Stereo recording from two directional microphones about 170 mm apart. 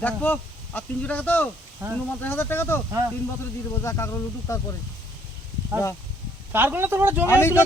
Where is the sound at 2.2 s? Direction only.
10° left (ahead or behind).